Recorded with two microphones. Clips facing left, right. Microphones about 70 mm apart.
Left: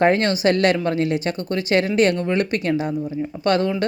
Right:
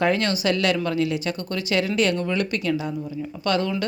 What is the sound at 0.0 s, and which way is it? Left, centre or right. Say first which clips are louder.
Speech: left 5 dB; left.